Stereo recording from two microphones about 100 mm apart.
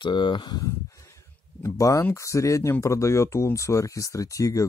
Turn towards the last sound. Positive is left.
turn(degrees=35)  # may be behind; listen again after turning